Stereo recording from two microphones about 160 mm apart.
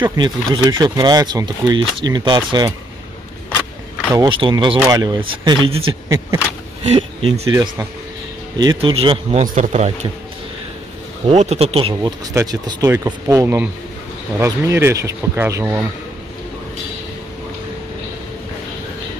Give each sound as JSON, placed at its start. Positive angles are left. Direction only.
{"t": 0.0, "sound": "speech", "side_deg": -25}
{"t": 3.4, "sound": "a sound", "side_deg": 10}
{"t": 4.1, "sound": "speech", "side_deg": -30}
{"t": 6.0, "sound": "speech", "side_deg": -20}
{"t": 6.8, "sound": "speech", "side_deg": -40}
{"t": 8.5, "sound": "speech", "side_deg": -30}
{"t": 9.4, "sound": "speech", "side_deg": -55}
{"t": 11.2, "sound": "speech", "side_deg": -40}
{"t": 12.0, "sound": "speech", "side_deg": -25}